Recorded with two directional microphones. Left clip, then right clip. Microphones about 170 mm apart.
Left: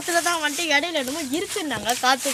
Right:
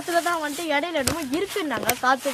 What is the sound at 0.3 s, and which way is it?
Speech, 10° left (ahead or behind).